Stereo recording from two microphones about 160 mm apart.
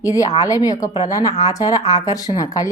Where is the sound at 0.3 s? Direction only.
20° left (ahead or behind).